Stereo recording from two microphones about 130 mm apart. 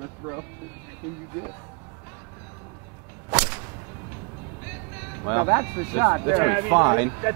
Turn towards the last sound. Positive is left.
turn(degrees=-20)  # may be behind; listen again after turning